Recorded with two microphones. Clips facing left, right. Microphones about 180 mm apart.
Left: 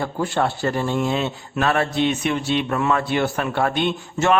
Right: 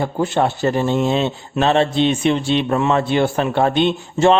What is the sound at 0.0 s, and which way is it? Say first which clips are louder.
Speech: right 4 dB; 20° right (ahead or behind).